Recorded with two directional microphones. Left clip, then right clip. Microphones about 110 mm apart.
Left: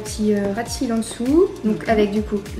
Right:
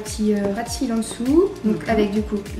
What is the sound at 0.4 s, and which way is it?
A woman's voice, 15° left (ahead or behind).